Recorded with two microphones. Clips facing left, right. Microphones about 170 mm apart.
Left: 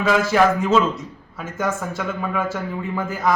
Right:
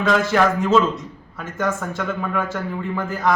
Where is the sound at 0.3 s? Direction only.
Centre (ahead or behind).